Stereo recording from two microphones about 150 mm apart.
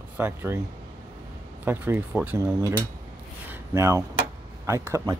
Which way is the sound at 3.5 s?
20° right (ahead or behind).